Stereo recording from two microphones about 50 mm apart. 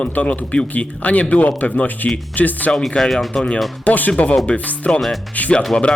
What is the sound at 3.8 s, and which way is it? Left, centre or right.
Speech, left.